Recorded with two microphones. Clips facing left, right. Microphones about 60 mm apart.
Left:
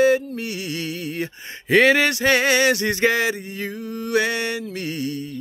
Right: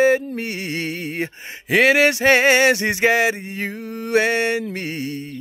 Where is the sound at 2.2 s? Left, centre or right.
Right.